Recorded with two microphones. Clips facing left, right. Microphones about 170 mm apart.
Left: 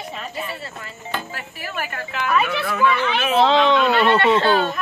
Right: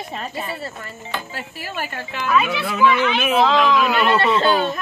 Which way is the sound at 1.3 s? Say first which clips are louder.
Right 1 dB; 30° right (ahead or behind).